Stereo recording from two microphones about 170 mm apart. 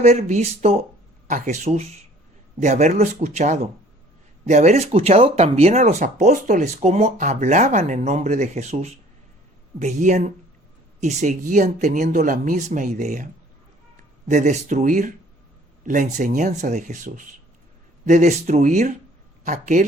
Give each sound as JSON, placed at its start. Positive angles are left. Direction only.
{"t": 0.3, "sound": "speech", "side_deg": -40}